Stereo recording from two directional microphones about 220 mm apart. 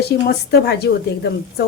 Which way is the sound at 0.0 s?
45° left (ahead or behind).